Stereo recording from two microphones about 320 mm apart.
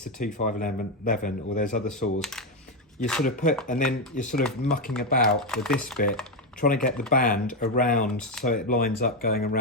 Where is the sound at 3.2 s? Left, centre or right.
Left.